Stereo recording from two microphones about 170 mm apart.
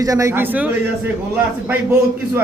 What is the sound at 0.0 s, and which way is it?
A man's voice, 20° right (ahead or behind).